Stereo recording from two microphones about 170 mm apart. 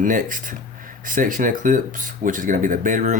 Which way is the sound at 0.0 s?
50° right (ahead or behind).